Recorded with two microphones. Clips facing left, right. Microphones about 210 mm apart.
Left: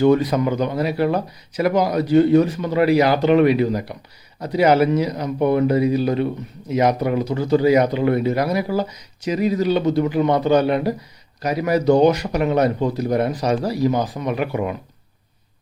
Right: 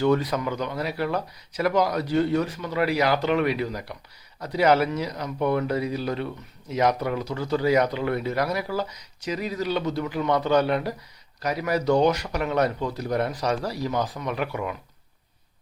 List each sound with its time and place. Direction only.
0.0 s speech: 20° left (ahead or behind)